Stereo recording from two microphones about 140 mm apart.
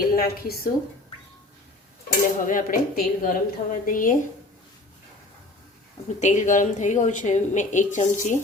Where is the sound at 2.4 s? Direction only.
75° left (ahead or behind).